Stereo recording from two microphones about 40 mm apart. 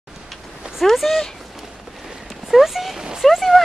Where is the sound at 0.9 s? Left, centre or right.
Centre.